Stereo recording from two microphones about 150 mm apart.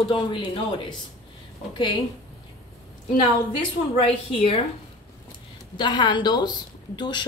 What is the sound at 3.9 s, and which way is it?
Speech, 40° left (ahead or behind).